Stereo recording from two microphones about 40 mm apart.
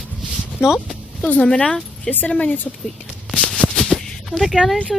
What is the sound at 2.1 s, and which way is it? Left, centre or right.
Speech, left.